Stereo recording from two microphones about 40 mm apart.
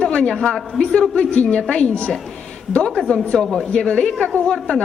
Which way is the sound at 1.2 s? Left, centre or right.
Left.